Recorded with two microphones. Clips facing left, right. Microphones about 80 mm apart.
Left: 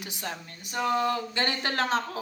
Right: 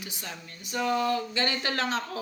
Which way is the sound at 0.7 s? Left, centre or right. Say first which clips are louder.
Even; left.